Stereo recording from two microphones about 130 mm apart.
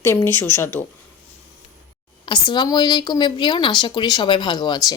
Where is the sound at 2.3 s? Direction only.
35° left (ahead or behind).